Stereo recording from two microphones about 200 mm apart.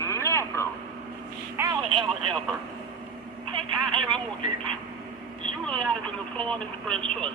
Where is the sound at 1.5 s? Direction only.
15° right (ahead or behind).